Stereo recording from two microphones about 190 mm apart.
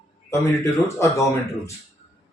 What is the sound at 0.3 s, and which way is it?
Speech, 15° left (ahead or behind).